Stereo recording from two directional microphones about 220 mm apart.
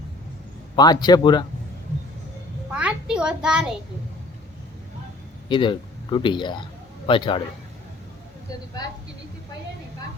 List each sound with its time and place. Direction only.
0.8 s speech: 20° left (ahead or behind)
2.7 s a sound: 5° right (ahead or behind)
5.5 s speech: 20° left (ahead or behind)